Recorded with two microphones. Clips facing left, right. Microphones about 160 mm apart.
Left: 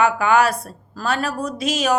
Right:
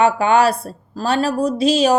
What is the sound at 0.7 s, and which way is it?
Mantra, 30° right (ahead or behind).